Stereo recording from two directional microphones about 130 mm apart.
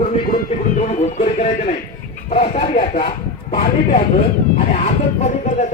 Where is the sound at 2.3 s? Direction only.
55° left (ahead or behind).